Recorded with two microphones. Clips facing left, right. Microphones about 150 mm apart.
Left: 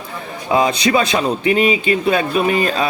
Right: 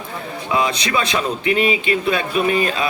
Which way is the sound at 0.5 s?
35° left (ahead or behind).